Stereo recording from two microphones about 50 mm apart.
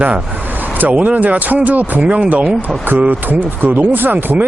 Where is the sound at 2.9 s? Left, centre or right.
Right.